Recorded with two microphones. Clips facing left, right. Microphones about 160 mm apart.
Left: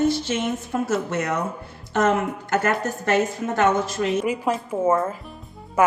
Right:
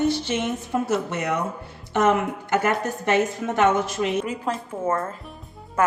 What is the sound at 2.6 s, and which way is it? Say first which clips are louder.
Speech: left 1 dB; 20° right (ahead or behind).